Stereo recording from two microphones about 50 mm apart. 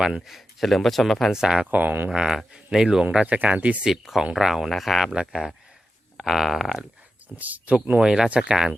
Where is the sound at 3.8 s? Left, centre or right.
Centre.